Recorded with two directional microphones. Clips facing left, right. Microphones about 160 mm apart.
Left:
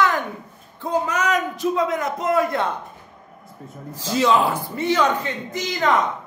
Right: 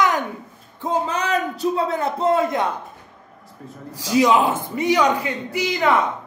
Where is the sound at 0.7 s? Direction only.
25° right (ahead or behind).